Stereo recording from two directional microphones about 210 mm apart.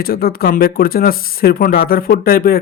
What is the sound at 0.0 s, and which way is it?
Speech, 45° left (ahead or behind).